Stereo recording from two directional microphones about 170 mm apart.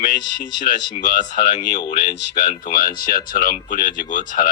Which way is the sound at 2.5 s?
55° left (ahead or behind).